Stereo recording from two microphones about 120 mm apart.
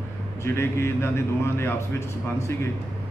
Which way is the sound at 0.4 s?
20° left (ahead or behind).